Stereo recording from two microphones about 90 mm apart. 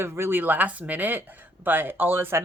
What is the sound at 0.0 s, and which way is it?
Speech, 30° right (ahead or behind).